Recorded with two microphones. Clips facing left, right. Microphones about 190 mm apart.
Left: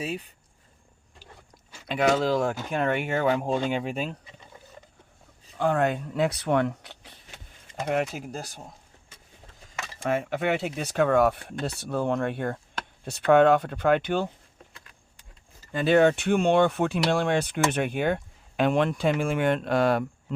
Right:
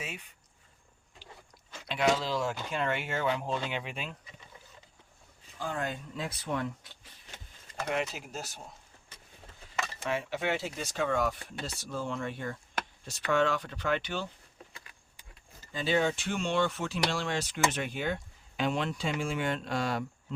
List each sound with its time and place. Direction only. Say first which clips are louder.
1.9 s speech: left 6 dB; 55° left (ahead or behind)
5.5 s speech: left 11 dB; 65° left (ahead or behind)
7.9 s speech: left 6 dB; 50° left (ahead or behind)
10.0 s speech: left 7 dB; 50° left (ahead or behind)
15.7 s speech: left 9 dB; 60° left (ahead or behind)